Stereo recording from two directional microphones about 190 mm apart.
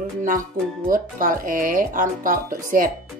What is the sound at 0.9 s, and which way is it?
Speech, 45° right (ahead or behind).